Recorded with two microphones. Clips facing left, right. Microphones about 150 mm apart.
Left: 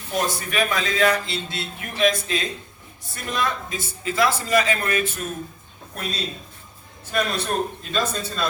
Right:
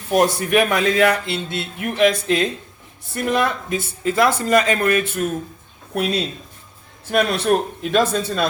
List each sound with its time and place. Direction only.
0.1 s a man's voice: 70° right (ahead or behind)